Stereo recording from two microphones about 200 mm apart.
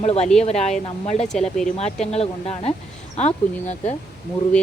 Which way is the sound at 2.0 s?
30° left (ahead or behind).